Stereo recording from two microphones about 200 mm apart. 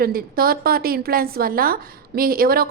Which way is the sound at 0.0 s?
45° right (ahead or behind).